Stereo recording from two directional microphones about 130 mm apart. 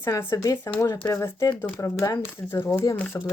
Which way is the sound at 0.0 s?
20° left (ahead or behind).